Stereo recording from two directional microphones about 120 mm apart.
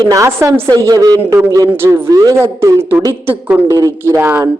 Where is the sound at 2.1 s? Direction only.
30° right (ahead or behind); by 4.4 s 15° right (ahead or behind).